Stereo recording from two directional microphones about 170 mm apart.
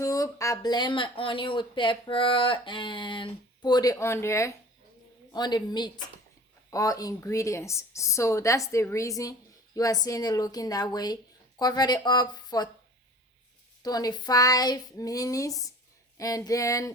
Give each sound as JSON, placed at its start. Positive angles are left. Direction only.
{"t": 0.0, "sound": "speech", "side_deg": 20}
{"t": 13.8, "sound": "speech", "side_deg": 20}